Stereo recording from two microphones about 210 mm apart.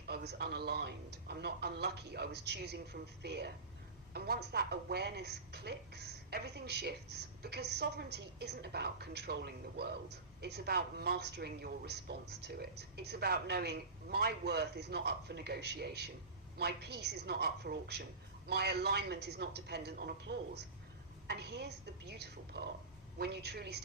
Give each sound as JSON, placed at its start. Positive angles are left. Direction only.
{"t": 0.1, "sound": "a woman's voice", "side_deg": -50}